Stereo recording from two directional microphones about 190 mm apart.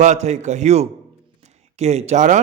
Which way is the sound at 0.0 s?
35° right (ahead or behind).